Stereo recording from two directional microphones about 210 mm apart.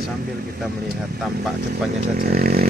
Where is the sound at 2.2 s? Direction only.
45° right (ahead or behind).